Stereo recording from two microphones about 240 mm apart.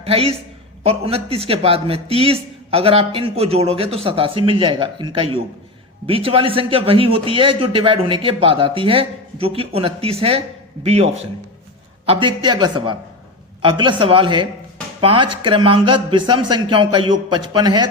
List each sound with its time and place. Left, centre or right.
0.0 s a man's voice: right